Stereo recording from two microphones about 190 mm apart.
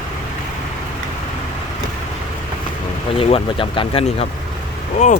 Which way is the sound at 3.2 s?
30° left (ahead or behind).